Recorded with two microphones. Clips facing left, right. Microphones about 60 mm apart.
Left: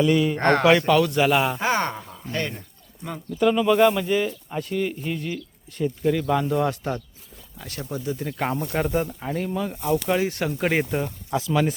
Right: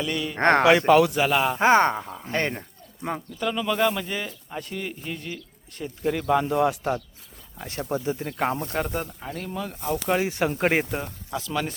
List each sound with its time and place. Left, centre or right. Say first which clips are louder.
0.0 s speech: left 9 dB; centre
0.3 s speech: right 1 dB; right
0.8 s speech: right 2 dB; centre
1.1 s speech: left 2 dB; centre
1.5 s speech: right 5 dB; right
3.3 s speech: left 8 dB; centre
7.6 s speech: right 3 dB; right
8.2 s speech: even; centre
10.1 s speech: even; centre
10.8 s speech: left 4 dB; centre
11.3 s speech: left 5 dB; centre